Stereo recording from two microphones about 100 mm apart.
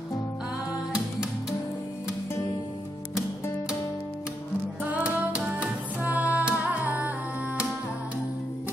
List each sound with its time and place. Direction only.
4.8 s music: 15° right (ahead or behind)